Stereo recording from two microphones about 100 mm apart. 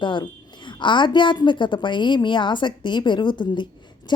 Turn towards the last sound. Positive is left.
turn(degrees=50)  # may be behind; listen again after turning